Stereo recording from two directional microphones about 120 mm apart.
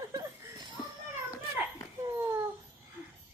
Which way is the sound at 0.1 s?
30° right (ahead or behind).